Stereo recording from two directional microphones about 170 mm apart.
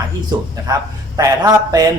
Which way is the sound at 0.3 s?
20° right (ahead or behind).